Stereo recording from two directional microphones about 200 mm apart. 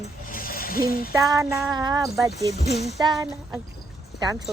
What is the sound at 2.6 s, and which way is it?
Speech, 55° left (ahead or behind).